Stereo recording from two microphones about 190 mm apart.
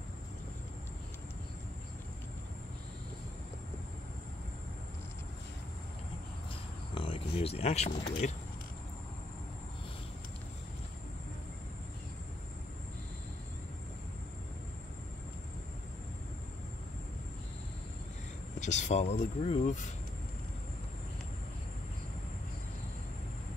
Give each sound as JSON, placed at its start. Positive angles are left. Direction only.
{"t": 6.5, "sound": "a sound", "side_deg": 25}
{"t": 7.3, "sound": "speech", "side_deg": 30}
{"t": 18.6, "sound": "speech", "side_deg": 40}